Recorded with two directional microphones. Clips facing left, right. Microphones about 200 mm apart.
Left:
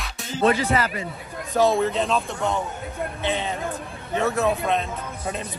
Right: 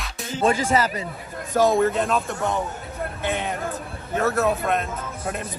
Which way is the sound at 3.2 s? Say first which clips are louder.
Even; 50° right (ahead or behind).